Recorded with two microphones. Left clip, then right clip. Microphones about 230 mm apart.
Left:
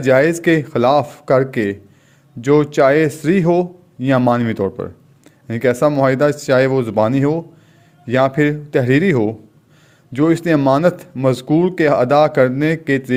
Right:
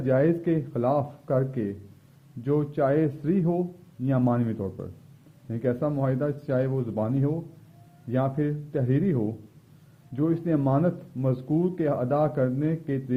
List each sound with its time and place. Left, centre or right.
0.0 s speech: left